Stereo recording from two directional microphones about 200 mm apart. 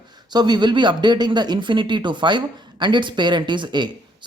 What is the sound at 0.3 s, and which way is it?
Speech, 20° right (ahead or behind).